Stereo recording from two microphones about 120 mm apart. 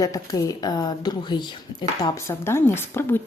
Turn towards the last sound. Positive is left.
turn(degrees=20)  # may be behind; listen again after turning